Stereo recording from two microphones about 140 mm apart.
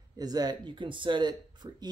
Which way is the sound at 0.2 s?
30° right (ahead or behind).